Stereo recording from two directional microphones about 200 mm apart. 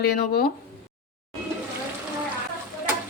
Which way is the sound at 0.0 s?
50° left (ahead or behind).